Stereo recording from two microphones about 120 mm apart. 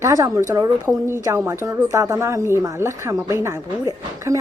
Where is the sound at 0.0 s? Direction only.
25° right (ahead or behind).